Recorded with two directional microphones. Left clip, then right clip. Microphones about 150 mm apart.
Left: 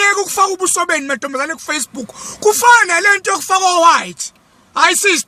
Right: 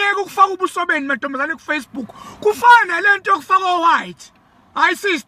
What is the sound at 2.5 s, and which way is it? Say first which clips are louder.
Speech: left 2 dB; 25° left (ahead or behind).